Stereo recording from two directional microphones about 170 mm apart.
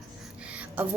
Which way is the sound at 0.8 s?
10° right (ahead or behind).